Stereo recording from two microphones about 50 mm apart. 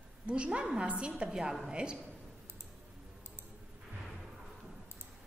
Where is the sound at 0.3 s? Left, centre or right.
Right.